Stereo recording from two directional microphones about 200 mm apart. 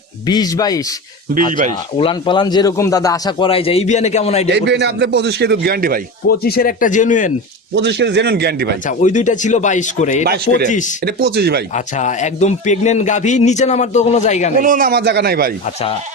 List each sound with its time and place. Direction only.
0.3 s a man's voice: 20° left (ahead or behind)
2.0 s a man's voice: 25° left (ahead or behind)
4.5 s a man's voice: 60° right (ahead or behind)
6.2 s speech: 50° left (ahead or behind)
7.8 s a man's voice: 60° right (ahead or behind)
8.9 s a man's voice: 40° left (ahead or behind)
10.2 s a man's voice: 50° right (ahead or behind)
10.7 s a man's voice: 40° left (ahead or behind)
11.0 s a man's voice: 55° right (ahead or behind)
11.7 s a man's voice: 35° left (ahead or behind)
14.6 s a man's voice: 45° right (ahead or behind)